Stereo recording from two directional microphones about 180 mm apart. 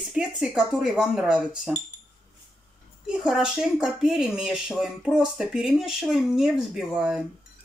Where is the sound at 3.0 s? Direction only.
5° right (ahead or behind).